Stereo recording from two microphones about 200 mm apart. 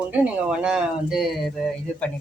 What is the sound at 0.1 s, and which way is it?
Speech, 5° right (ahead or behind).